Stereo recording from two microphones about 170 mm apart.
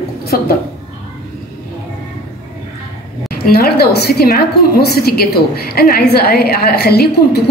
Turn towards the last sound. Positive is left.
turn(degrees=70)  # may be behind; listen again after turning